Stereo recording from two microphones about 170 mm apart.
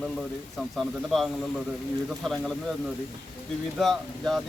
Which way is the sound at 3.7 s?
Centre (ahead or behind).